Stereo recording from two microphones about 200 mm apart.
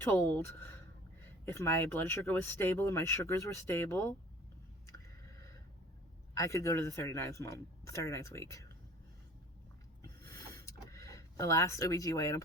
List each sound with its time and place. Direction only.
0.0 s speech: 15° left (ahead or behind)
6.3 s speech: 15° left (ahead or behind)
10.5 s a sound: 15° left (ahead or behind)